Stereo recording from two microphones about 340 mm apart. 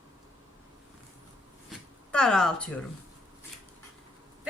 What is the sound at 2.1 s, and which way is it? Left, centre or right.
Speech, centre.